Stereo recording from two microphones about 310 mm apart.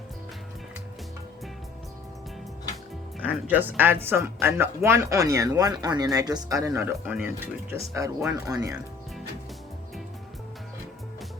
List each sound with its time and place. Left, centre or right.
3.2 s speech: centre